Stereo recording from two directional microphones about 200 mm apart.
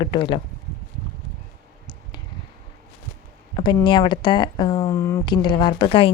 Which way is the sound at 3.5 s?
25° left (ahead or behind).